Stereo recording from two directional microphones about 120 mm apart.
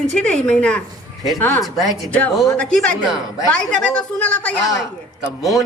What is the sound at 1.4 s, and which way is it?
Speech, 20° left (ahead or behind).